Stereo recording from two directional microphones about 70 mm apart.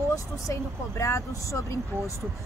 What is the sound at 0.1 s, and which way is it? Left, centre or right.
A woman's voice, left.